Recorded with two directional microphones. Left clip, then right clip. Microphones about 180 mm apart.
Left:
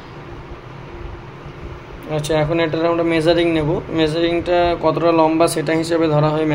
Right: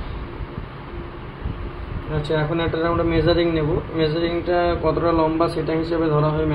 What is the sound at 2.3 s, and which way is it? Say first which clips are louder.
A man's voice: left 5 dB; 55° left (ahead or behind).